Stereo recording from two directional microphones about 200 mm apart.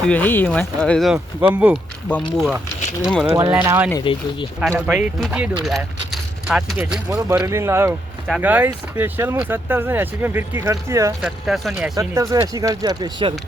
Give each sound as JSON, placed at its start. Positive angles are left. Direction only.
{"t": 0.0, "sound": "speech", "side_deg": 5}
{"t": 2.0, "sound": "speech", "side_deg": 5}
{"t": 3.3, "sound": "speech", "side_deg": -15}
{"t": 4.0, "sound": "speech", "side_deg": 25}
{"t": 4.9, "sound": "speech", "side_deg": -5}
{"t": 11.2, "sound": "speech", "side_deg": 0}
{"t": 11.9, "sound": "speech", "side_deg": -20}